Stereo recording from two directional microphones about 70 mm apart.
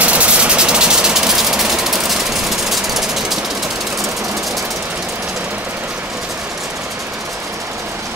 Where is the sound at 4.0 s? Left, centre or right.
Right.